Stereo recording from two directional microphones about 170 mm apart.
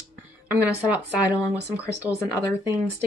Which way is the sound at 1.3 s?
20° left (ahead or behind).